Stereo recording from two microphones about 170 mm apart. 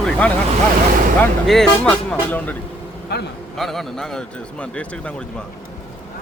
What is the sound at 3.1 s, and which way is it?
Speech, 75° left (ahead or behind).